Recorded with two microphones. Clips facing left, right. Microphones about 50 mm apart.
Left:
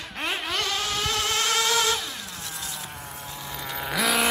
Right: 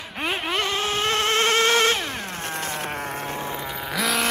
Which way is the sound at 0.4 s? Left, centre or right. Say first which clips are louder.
Right 5 dB; right.